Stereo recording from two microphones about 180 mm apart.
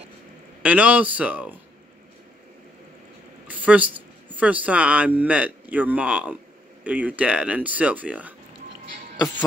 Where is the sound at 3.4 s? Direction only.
10° right (ahead or behind).